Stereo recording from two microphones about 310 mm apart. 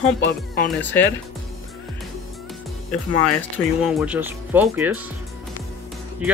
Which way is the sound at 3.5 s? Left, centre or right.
Centre.